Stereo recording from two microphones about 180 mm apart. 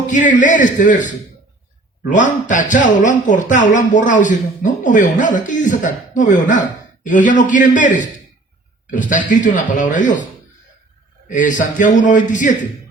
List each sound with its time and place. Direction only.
0.1 s a man's voice: 45° left (ahead or behind)
11.3 s a man's voice: 45° left (ahead or behind)